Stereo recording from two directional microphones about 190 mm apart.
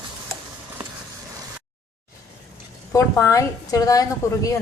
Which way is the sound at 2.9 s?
15° left (ahead or behind).